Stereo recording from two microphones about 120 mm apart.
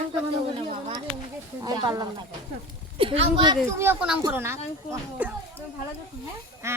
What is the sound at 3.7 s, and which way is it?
Speech, 15° right (ahead or behind).